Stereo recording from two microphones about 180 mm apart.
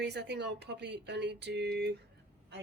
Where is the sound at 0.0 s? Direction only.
70° right (ahead or behind).